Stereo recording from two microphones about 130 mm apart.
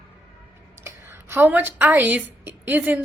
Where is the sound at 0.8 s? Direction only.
20° right (ahead or behind).